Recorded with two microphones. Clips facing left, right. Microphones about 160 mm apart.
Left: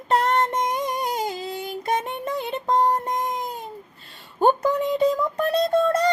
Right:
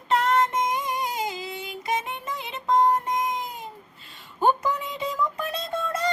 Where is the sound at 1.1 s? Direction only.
40° left (ahead or behind).